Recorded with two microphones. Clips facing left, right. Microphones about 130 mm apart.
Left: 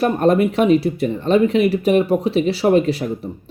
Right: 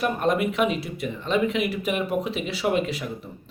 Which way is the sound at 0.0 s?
35° left (ahead or behind).